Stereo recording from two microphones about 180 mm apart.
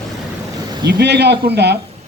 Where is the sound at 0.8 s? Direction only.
70° right (ahead or behind).